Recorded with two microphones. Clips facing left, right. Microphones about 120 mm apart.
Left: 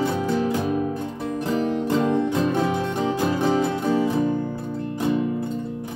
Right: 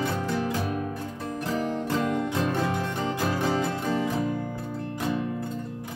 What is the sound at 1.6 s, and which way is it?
Music, 20° left (ahead or behind).